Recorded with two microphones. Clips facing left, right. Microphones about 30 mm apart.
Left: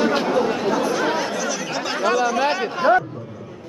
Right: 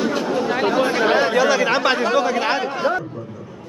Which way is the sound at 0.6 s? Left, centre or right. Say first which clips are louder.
Right 3 dB; right.